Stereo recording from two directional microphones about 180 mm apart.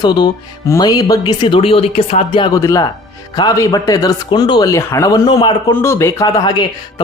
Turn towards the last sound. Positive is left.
turn(degrees=25)  # may be behind; listen again after turning